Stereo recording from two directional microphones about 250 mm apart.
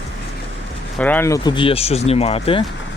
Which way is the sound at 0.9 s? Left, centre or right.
Centre.